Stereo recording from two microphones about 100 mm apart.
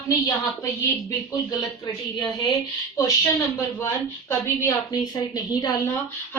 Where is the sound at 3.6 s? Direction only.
25° left (ahead or behind).